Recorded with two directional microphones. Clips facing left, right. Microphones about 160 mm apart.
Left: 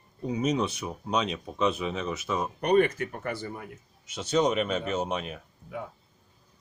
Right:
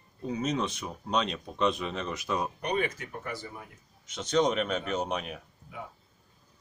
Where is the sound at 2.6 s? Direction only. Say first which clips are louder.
Left 8 dB; 55° left (ahead or behind).